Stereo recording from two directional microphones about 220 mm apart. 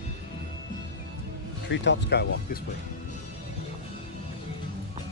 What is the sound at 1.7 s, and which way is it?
Speech, 55° left (ahead or behind).